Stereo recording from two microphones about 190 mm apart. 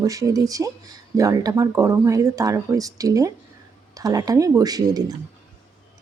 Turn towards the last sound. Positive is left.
turn(degrees=-20)  # may be behind; listen again after turning